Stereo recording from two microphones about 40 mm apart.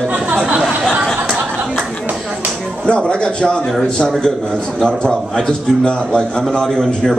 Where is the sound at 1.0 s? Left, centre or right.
Right.